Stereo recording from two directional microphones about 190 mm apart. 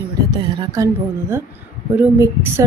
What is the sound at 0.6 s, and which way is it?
Speech, 20° right (ahead or behind).